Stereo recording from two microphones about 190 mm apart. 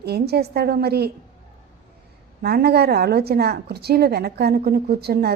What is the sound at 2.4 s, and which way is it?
A woman's voice, 55° right (ahead or behind).